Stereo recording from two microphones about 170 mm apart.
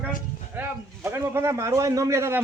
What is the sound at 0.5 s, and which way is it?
A man's voice, 15° right (ahead or behind).